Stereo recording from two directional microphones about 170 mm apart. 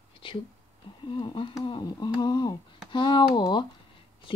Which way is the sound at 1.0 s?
30° left (ahead or behind).